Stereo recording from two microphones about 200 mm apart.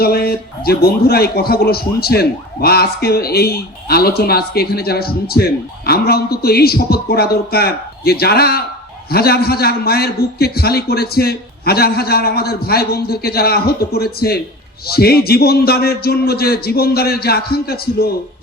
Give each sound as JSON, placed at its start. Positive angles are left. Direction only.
{"t": 0.0, "sound": "a man's voice", "side_deg": 50}